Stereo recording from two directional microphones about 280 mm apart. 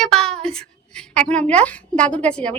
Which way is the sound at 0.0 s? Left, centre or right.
Centre.